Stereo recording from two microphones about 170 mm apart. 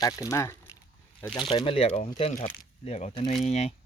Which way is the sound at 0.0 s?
20° left (ahead or behind).